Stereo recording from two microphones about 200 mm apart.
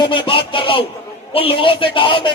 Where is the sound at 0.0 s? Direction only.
25° left (ahead or behind).